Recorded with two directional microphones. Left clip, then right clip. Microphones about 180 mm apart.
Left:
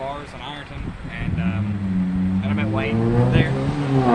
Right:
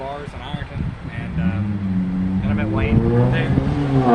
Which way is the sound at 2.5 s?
15° left (ahead or behind).